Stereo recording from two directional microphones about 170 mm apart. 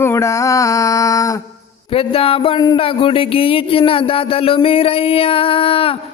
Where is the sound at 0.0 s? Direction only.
15° left (ahead or behind).